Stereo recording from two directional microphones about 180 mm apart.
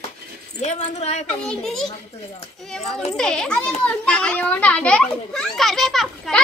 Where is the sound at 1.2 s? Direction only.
5° left (ahead or behind).